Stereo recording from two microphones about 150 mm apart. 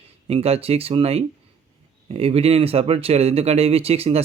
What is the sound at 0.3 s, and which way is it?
Speech, 40° right (ahead or behind).